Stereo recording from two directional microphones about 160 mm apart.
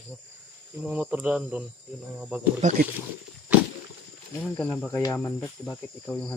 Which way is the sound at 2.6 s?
50° right (ahead or behind).